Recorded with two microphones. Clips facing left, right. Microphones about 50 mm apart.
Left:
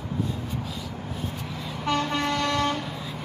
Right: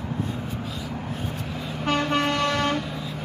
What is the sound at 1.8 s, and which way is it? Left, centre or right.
Vehicle, right.